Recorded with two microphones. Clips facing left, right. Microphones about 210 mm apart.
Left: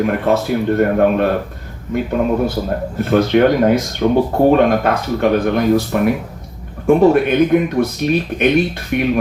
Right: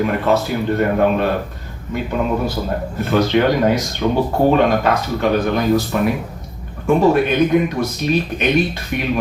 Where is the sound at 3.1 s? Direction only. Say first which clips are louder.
Left 3 dB; 55° left (ahead or behind).